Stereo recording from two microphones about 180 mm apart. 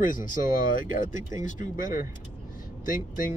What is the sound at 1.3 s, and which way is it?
Speech, 50° left (ahead or behind).